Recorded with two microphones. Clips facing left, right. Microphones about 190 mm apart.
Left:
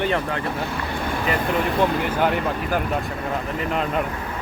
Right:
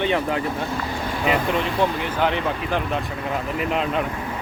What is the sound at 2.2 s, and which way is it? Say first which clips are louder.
Speech: right 3 dB; 10° left (ahead or behind).